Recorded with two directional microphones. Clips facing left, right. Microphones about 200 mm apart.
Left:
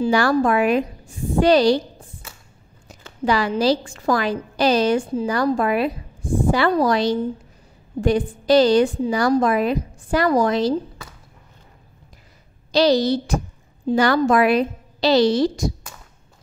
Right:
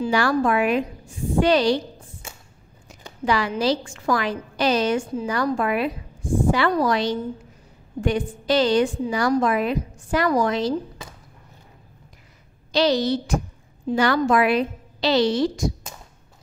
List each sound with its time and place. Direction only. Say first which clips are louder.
0.0 s a woman's voice: left 3 dB; 40° left (ahead or behind)
3.3 s a woman's voice: left 3 dB; 35° left (ahead or behind)
12.7 s a woman's voice: left 3 dB; 35° left (ahead or behind)